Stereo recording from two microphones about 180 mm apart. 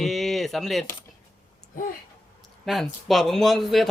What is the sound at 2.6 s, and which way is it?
Laughter, centre (ahead or behind).